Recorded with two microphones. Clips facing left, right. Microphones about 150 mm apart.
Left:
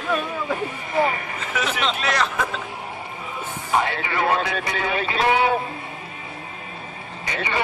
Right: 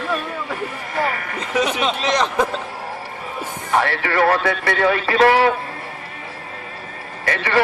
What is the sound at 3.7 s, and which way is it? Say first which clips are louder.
A man's voice: right 4 dB; 70° right (ahead or behind).